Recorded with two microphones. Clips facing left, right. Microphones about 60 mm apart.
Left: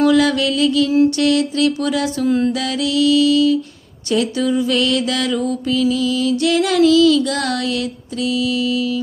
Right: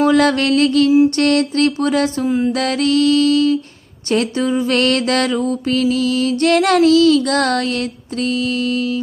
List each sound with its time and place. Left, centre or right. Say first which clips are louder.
0.0 s mantra: right 1 dB; right
2.2 s music: left 1 dB; centre
2.5 s mantra: right 3 dB; right
4.1 s a woman's voice: even; right
4.7 s mantra: right 2 dB; right
5.3 s mantra: right 1 dB; right